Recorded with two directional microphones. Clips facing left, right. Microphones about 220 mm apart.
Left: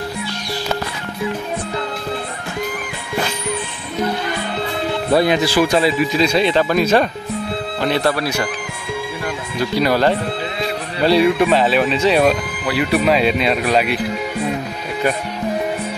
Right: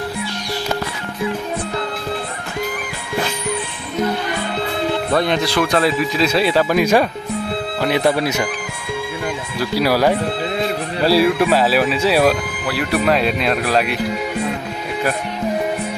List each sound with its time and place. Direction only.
5.1 s speech: 5° left (ahead or behind); by 8.5 s 20° right (ahead or behind)
9.6 s speech: 5° right (ahead or behind)